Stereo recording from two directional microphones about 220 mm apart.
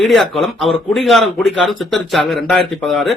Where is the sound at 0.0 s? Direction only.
Centre (ahead or behind).